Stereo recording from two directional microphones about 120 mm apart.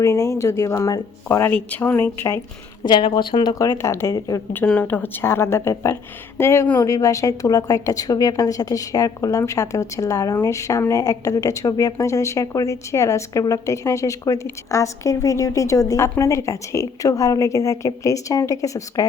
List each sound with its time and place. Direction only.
0.0 s a woman's voice: 25° left (ahead or behind)
1.5 s speech: 15° left (ahead or behind)
2.8 s speech: 40° left (ahead or behind)
3.5 s a woman's voice: 25° left (ahead or behind)
4.6 s a woman's voice: 10° left (ahead or behind); by 19.0 s 25° left (ahead or behind)